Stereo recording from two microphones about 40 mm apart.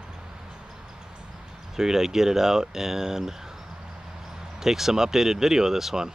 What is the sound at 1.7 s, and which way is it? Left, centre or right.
Speech, centre.